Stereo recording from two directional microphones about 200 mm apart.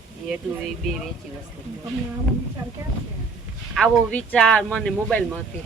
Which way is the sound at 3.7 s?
5° right (ahead or behind).